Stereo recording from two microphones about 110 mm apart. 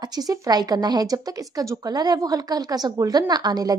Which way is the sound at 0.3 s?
35° right (ahead or behind).